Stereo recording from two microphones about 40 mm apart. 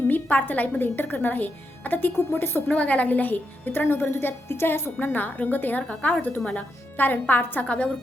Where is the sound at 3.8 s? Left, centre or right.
Left.